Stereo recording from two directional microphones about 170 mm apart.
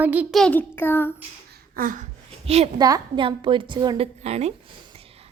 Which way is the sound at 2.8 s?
25° right (ahead or behind).